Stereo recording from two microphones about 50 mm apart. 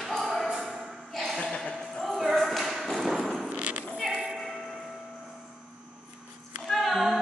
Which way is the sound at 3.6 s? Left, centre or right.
Right.